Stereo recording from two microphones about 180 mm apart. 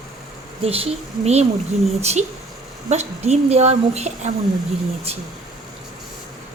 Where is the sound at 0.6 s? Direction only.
35° right (ahead or behind).